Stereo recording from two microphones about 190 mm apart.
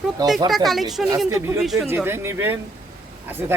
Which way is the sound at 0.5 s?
Centre (ahead or behind).